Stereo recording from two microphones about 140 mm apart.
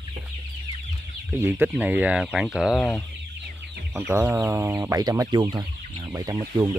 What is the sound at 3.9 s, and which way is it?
Speech, 20° right (ahead or behind).